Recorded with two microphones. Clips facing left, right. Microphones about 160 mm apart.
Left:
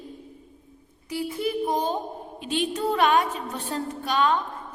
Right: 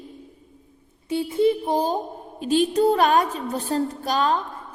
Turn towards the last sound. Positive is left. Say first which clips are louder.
# right 1 dB
turn(degrees=-40)  # may be behind; listen again after turning